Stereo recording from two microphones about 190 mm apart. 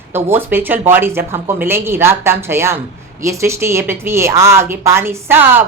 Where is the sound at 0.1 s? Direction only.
10° right (ahead or behind).